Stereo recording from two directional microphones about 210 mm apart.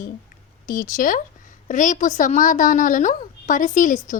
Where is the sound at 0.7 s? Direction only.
40° left (ahead or behind).